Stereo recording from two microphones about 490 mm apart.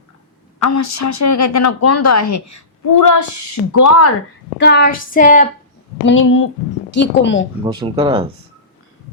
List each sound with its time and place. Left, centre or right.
0.6 s a woman's voice: left
4.6 s a sound: centre
6.1 s a woman's voice: left
7.6 s speech: centre